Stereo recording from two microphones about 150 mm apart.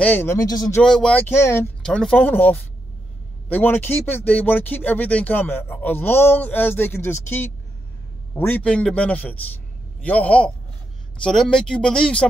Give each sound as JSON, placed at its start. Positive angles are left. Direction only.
{"t": 0.0, "sound": "speech", "side_deg": 15}
{"t": 0.8, "sound": "speech", "side_deg": 5}
{"t": 1.8, "sound": "speech", "side_deg": 5}